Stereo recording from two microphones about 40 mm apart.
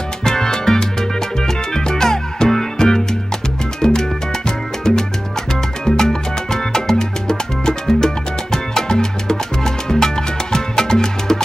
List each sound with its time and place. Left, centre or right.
0.2 s music: centre
5.5 s salsa music: centre